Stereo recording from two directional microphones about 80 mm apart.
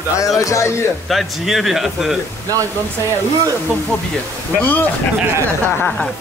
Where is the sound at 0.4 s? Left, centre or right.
Left.